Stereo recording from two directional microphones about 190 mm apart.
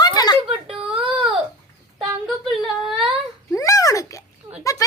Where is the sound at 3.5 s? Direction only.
15° left (ahead or behind).